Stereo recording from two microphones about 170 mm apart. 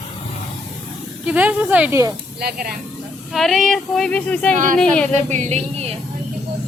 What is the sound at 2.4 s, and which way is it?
Speech, 60° right (ahead or behind).